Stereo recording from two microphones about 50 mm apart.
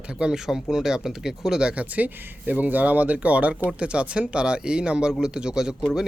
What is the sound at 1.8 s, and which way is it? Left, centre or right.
Speech, right.